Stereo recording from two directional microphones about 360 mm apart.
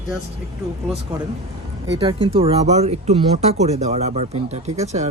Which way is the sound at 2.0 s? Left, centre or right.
Centre.